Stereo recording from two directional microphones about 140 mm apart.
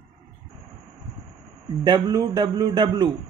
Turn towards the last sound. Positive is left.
turn(degrees=-30)  # may be behind; listen again after turning